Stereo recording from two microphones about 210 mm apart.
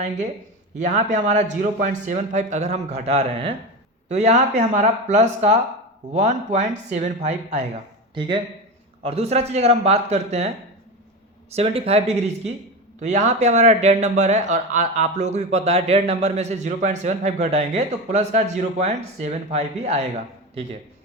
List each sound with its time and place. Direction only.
0.8 s speech: 35° right (ahead or behind)
8.1 s speech: 20° right (ahead or behind)
11.5 s speech: 30° right (ahead or behind)